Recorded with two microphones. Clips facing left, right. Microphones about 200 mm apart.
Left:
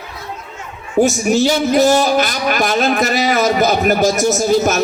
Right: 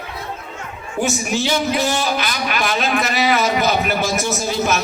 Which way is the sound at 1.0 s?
40° left (ahead or behind).